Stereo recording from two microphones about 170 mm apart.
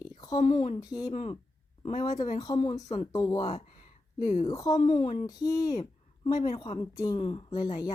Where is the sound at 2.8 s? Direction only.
40° left (ahead or behind).